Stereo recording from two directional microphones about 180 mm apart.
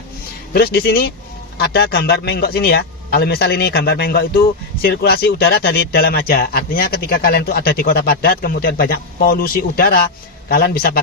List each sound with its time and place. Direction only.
0.5 s speech: 60° left (ahead or behind)